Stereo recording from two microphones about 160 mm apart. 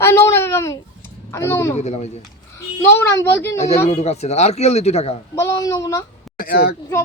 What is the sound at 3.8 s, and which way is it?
Speech, 40° left (ahead or behind).